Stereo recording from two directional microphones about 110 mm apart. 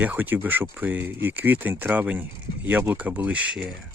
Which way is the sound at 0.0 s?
15° right (ahead or behind).